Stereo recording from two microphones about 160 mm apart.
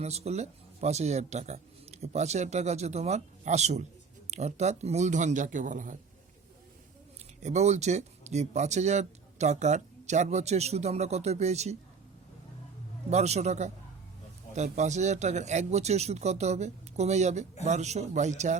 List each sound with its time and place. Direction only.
0.0 s speech: 40° right (ahead or behind)
7.4 s speech: 45° right (ahead or behind)
13.1 s speech: 45° right (ahead or behind)